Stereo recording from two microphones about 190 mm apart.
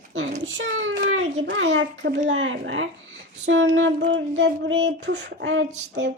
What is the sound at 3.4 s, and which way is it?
Speech, 75° right (ahead or behind).